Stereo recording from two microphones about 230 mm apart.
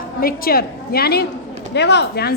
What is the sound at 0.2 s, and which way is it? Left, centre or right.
A woman's voice, left.